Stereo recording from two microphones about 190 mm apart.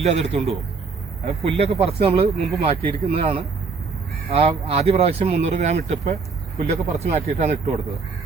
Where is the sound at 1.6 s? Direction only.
30° right (ahead or behind).